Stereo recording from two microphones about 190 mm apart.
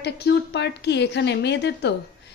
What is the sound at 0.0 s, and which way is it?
A woman's voice, 60° left (ahead or behind).